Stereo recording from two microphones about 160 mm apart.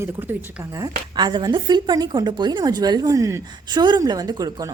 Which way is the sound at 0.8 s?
25° right (ahead or behind).